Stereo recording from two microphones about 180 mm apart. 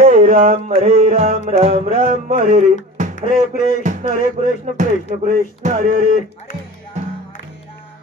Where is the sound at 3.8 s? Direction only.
45° right (ahead or behind).